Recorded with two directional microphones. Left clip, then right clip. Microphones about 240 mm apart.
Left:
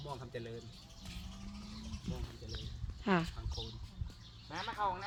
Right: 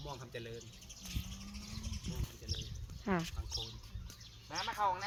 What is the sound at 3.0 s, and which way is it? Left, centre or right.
Speech, centre.